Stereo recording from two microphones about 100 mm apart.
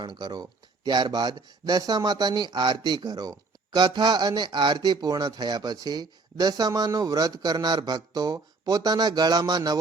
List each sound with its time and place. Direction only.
0.0 s speech: 45° right (ahead or behind)